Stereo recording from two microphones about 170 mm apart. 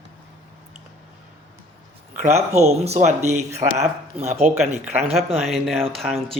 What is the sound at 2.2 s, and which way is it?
Speech, 40° right (ahead or behind).